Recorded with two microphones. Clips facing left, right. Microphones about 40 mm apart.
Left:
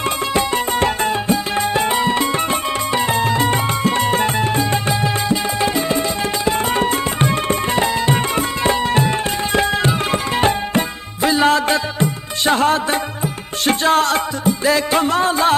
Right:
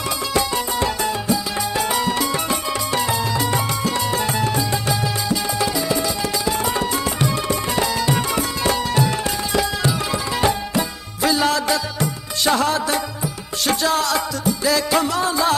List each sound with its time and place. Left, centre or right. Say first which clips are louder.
0.3 s music: left 2 dB; left